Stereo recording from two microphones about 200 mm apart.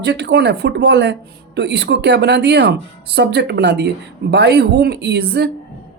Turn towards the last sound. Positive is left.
turn(degrees=-55)  # may be behind; listen again after turning